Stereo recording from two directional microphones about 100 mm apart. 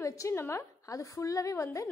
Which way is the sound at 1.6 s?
20° left (ahead or behind).